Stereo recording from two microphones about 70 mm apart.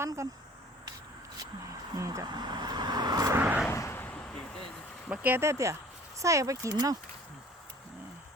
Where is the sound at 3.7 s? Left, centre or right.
Left.